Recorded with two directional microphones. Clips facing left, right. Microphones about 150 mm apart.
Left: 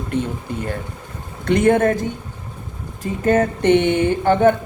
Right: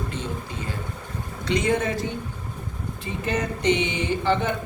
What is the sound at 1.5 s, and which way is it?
Speech, 55° left (ahead or behind).